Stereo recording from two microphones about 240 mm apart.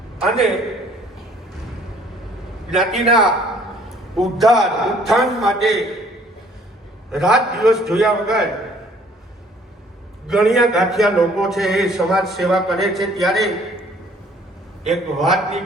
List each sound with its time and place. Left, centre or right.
0.2 s a man's voice: centre
2.6 s a man's voice: centre
7.1 s a man's voice: centre
10.2 s a man's voice: centre
14.8 s a man's voice: centre